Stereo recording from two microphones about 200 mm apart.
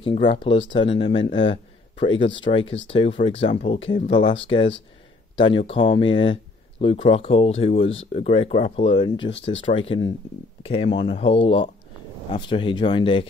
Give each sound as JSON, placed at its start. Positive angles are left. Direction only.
{"t": 0.0, "sound": "speech", "side_deg": 25}